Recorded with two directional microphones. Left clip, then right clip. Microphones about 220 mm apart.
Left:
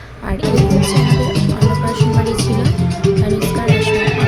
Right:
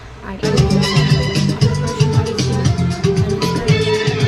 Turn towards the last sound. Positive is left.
turn(degrees=-5)  # may be behind; listen again after turning